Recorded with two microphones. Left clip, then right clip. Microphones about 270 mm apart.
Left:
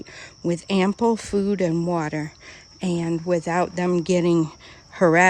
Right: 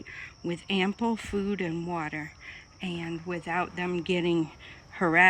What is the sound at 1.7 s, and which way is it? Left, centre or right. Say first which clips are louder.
Speech: left 9 dB; right.